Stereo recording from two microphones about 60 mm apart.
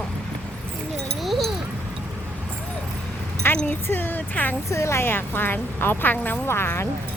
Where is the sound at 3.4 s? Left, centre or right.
Left.